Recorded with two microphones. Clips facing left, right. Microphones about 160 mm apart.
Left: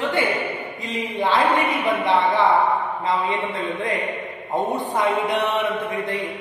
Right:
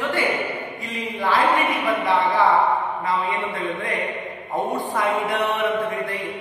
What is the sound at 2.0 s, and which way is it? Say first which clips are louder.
Speech: left 1 dB; 20° left (ahead or behind).